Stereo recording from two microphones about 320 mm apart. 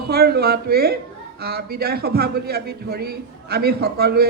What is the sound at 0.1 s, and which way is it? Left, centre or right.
A man's voice, right.